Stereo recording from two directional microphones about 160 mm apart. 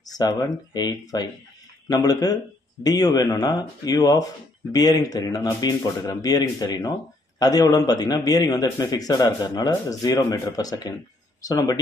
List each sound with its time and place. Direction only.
0.1 s a man's voice: 20° left (ahead or behind)